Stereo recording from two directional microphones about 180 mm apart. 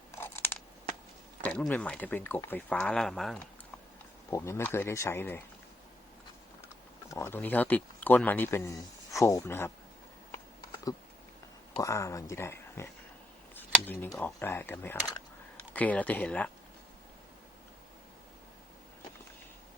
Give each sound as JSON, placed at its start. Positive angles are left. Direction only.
{"t": 0.1, "sound": "a sound", "side_deg": 15}
{"t": 1.5, "sound": "speech", "side_deg": 5}
{"t": 4.3, "sound": "speech", "side_deg": 15}
{"t": 7.1, "sound": "speech", "side_deg": 15}
{"t": 11.8, "sound": "speech", "side_deg": 15}